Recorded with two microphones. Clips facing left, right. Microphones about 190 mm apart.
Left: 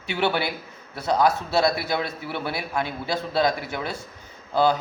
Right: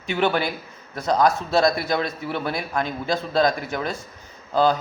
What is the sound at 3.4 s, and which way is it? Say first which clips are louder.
Speech: right 2 dB; 45° right (ahead or behind).